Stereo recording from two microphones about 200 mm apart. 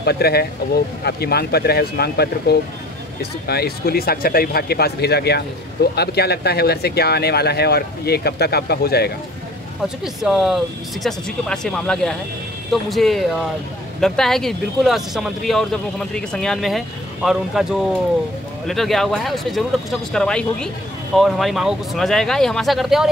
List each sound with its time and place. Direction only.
0.0 s speech: 55° left (ahead or behind)
10.0 s speech: centre (ahead or behind)